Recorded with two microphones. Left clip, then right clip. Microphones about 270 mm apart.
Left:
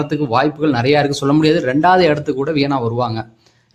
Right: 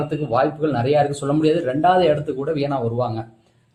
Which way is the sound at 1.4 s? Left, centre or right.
Left.